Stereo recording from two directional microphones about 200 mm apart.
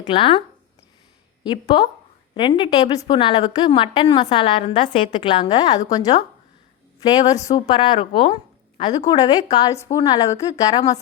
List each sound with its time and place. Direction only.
0.0 s a woman's voice: 25° left (ahead or behind)
1.5 s a woman's voice: 20° left (ahead or behind)